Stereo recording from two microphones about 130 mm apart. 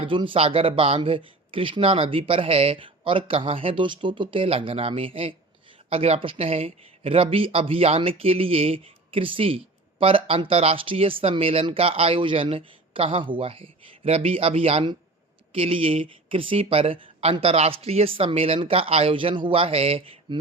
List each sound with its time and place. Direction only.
0.2 s speech: 45° right (ahead or behind)
20.3 s speech: 35° right (ahead or behind)